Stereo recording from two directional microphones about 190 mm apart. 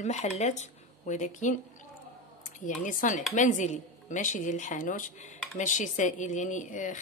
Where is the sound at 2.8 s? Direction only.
45° left (ahead or behind).